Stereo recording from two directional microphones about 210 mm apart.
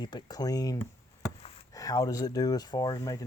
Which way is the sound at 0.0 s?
20° left (ahead or behind).